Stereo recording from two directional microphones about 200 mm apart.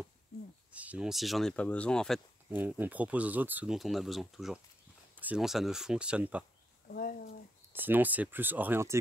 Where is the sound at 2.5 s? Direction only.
10° right (ahead or behind).